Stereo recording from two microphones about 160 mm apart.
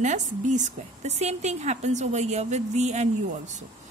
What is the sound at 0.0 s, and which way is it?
A woman's voice, 50° right (ahead or behind).